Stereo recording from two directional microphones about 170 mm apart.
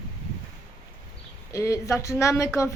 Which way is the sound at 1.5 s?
20° left (ahead or behind).